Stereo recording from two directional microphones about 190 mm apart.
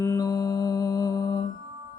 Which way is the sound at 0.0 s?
15° left (ahead or behind).